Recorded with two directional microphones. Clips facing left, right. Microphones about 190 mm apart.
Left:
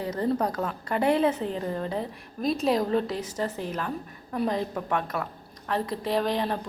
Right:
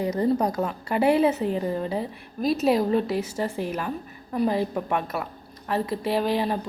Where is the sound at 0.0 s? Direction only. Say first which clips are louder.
Right 4 dB; 15° right (ahead or behind).